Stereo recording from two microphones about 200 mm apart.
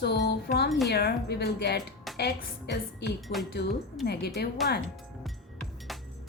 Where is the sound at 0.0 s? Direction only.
60° left (ahead or behind).